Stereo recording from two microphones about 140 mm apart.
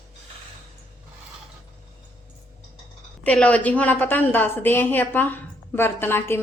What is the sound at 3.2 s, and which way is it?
A woman's voice, 10° left (ahead or behind).